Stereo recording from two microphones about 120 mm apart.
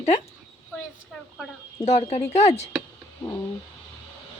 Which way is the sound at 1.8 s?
55° left (ahead or behind).